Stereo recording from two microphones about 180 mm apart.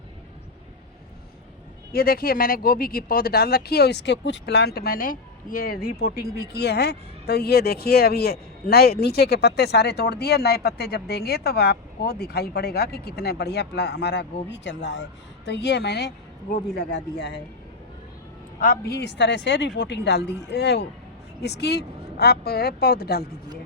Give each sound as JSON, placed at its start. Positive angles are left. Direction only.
{"t": 1.9, "sound": "a woman's voice", "side_deg": 55}
{"t": 18.6, "sound": "a woman's voice", "side_deg": 55}